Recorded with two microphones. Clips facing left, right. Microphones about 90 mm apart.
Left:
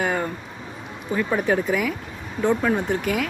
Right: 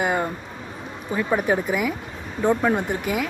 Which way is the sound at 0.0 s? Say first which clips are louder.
Right 1 dB; 10° right (ahead or behind).